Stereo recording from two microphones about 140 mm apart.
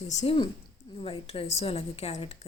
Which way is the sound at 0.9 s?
40° left (ahead or behind).